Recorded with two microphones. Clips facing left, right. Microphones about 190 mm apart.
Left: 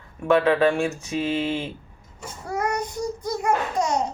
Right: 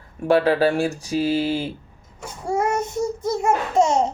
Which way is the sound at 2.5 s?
25° right (ahead or behind).